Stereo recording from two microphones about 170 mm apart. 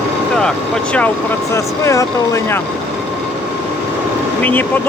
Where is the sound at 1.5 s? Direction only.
20° left (ahead or behind).